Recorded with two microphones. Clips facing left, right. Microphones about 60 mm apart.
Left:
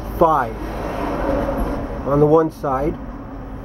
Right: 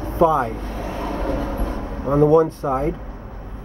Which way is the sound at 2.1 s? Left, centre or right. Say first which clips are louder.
Left 1 dB; centre.